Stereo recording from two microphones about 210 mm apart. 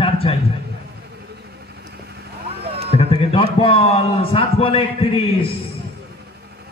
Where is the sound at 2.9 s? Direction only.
25° left (ahead or behind).